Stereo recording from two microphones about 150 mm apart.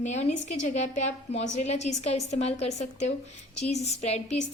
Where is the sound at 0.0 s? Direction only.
50° left (ahead or behind).